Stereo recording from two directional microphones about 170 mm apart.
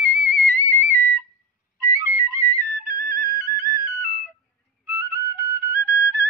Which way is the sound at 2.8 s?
55° right (ahead or behind).